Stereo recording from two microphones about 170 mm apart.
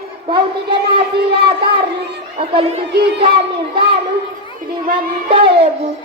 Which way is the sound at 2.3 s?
35° right (ahead or behind).